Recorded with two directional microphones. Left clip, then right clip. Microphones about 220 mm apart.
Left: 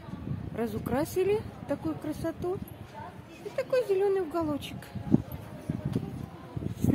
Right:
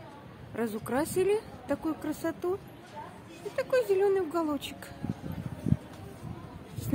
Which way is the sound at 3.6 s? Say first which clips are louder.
Right 1 dB; 5° right (ahead or behind).